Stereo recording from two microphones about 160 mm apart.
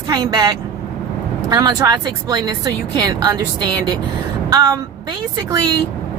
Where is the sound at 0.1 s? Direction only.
25° right (ahead or behind).